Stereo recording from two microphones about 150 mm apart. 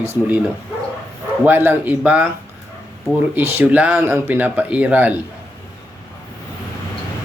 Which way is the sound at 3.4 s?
15° right (ahead or behind).